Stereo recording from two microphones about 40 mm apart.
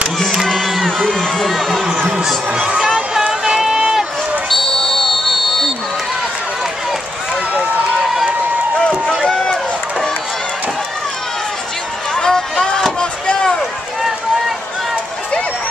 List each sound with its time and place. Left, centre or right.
0.6 s crowd: centre
1.0 s speech: centre
2.2 s speech: centre
3.3 s a sound: right
4.5 s buzzer: centre
9.3 s run: left
12.2 s music: centre
13.0 s chop: left